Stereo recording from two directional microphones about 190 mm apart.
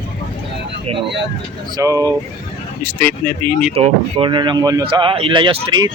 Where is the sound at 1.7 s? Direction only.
15° right (ahead or behind).